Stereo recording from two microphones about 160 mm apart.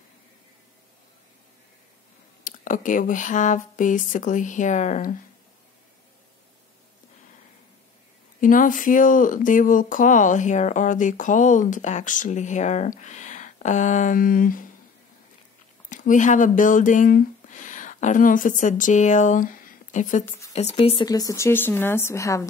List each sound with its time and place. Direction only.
2.4 s speech: 55° left (ahead or behind)
8.4 s speech: 55° left (ahead or behind)
15.9 s speech: 50° left (ahead or behind)
20.2 s speech: 20° left (ahead or behind)
20.7 s speech: 35° left (ahead or behind)
21.1 s a woman's voice: 20° left (ahead or behind)